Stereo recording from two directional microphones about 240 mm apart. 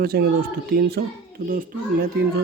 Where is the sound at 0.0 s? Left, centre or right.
Right.